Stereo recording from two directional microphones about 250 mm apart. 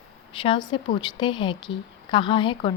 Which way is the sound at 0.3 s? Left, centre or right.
Centre.